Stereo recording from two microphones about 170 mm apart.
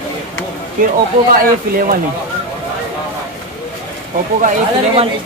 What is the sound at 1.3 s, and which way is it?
Speech, 55° right (ahead or behind).